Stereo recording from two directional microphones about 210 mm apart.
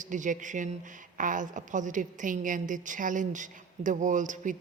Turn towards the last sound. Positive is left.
turn(degrees=-35)  # may be behind; listen again after turning